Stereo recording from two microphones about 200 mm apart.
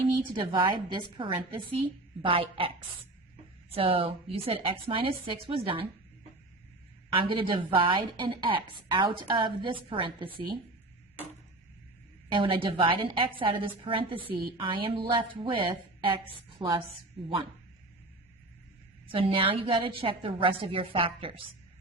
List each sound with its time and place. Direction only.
0.3 s a woman's voice: 25° right (ahead or behind)
7.1 s a woman's voice: 25° right (ahead or behind)
12.3 s a woman's voice: 25° right (ahead or behind)
19.0 s a woman's voice: 25° right (ahead or behind)